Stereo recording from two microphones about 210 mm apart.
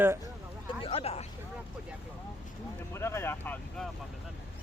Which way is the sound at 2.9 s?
10° left (ahead or behind).